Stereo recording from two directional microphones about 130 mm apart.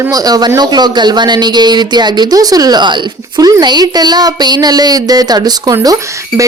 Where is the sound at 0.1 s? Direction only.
30° right (ahead or behind).